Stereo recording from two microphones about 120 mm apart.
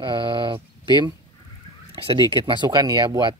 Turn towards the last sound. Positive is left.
turn(degrees=-40)  # may be behind; listen again after turning